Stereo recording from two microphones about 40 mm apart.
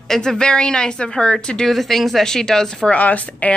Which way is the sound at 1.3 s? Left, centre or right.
Centre.